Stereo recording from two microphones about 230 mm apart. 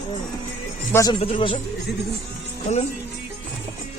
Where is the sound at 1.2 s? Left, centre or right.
Left.